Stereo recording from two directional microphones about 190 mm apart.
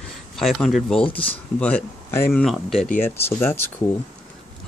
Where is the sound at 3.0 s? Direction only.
10° left (ahead or behind).